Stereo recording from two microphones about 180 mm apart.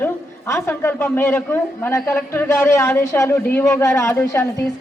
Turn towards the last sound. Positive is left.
turn(degrees=15)  # may be behind; listen again after turning